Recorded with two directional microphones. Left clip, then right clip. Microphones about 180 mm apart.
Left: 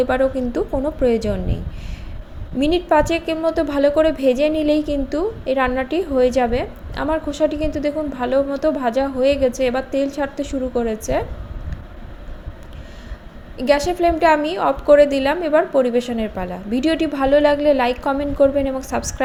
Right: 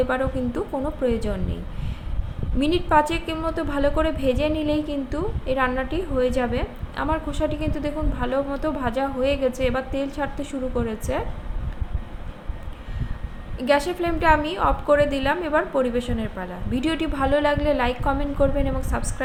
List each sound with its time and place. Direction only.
0.0 s a woman's voice: 25° left (ahead or behind)
2.6 s a woman's voice: 15° left (ahead or behind)
13.6 s a woman's voice: 25° left (ahead or behind)